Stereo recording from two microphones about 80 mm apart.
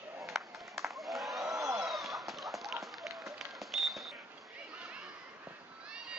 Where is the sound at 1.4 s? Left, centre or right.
Right.